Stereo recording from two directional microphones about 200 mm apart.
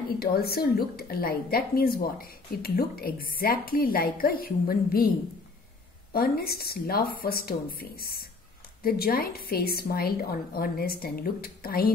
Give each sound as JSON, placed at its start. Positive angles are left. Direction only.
{"t": 0.2, "sound": "a woman's voice", "side_deg": 50}
{"t": 6.1, "sound": "a woman's voice", "side_deg": 50}